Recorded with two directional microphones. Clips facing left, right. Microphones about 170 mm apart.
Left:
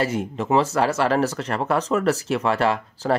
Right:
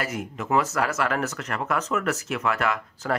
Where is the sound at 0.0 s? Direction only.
30° left (ahead or behind).